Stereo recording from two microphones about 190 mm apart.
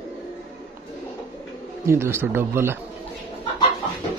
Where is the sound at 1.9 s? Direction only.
10° right (ahead or behind).